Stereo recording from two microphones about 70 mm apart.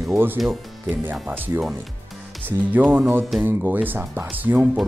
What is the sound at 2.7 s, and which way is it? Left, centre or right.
Speech, right.